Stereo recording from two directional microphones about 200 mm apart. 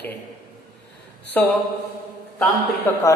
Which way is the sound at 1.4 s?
10° left (ahead or behind).